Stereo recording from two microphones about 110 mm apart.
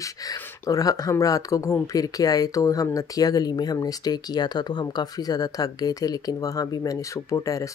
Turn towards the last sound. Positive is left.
turn(degrees=30)  # may be behind; listen again after turning